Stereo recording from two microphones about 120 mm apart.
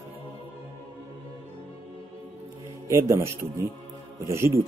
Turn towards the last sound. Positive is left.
turn(degrees=-25)  # may be behind; listen again after turning